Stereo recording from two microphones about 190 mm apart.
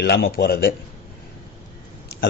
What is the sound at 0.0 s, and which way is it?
Speech, 55° left (ahead or behind).